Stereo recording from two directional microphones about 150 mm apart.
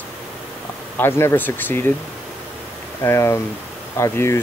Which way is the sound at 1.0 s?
15° left (ahead or behind).